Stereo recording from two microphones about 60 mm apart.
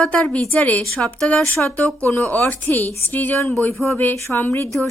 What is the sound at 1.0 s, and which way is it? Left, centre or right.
Speech, centre.